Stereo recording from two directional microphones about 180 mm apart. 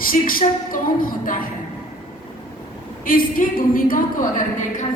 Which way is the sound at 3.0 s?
50° left (ahead or behind).